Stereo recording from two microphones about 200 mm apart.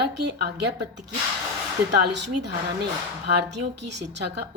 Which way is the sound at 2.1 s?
60° right (ahead or behind).